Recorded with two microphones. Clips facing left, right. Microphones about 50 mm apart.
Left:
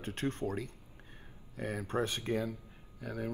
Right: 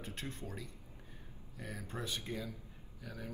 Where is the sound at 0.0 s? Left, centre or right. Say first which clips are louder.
Left 9 dB; left.